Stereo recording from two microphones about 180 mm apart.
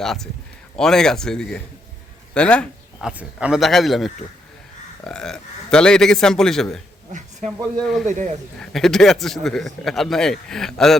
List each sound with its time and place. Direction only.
0.0 s a man's voice: centre (ahead or behind)
3.1 s a man's voice: 5° right (ahead or behind)
7.4 s speech: 40° right (ahead or behind)
7.8 s a man's voice: centre (ahead or behind)
8.0 s speech: 45° right (ahead or behind)
8.5 s a man's voice: centre (ahead or behind)